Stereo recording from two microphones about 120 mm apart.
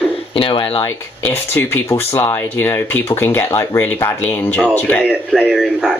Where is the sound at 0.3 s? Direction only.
45° left (ahead or behind).